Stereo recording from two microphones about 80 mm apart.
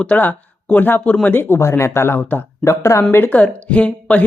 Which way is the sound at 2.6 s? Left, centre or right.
Left.